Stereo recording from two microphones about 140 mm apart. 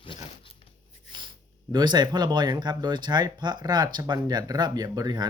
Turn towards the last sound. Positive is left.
turn(degrees=-30)  # may be behind; listen again after turning